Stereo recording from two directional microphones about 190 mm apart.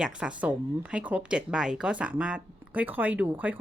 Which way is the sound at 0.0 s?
5° right (ahead or behind).